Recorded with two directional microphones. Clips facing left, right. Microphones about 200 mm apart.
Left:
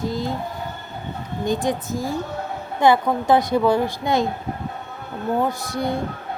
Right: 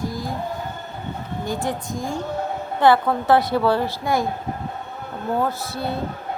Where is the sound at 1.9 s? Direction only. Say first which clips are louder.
Left 2 dB; 5° left (ahead or behind).